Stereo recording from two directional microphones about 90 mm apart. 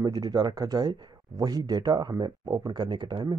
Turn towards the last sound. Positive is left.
turn(degrees=-55)  # may be behind; listen again after turning